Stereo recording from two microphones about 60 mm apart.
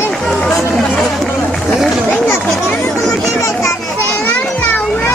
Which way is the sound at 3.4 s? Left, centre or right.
Left.